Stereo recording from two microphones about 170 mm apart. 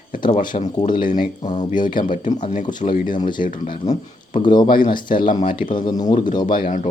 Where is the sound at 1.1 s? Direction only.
50° left (ahead or behind).